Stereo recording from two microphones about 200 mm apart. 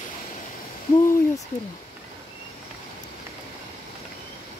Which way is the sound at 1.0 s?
15° left (ahead or behind).